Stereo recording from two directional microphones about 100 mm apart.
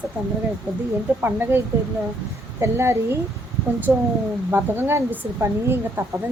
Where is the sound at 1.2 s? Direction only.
20° right (ahead or behind).